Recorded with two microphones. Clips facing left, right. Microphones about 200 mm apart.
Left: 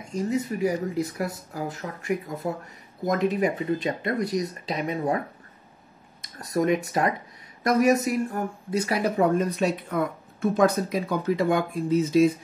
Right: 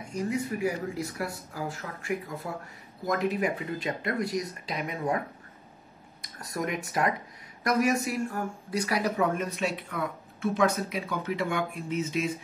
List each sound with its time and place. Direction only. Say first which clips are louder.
0.1 s speech: left 4 dB; 25° left (ahead or behind)
6.4 s speech: left 9 dB; 25° left (ahead or behind)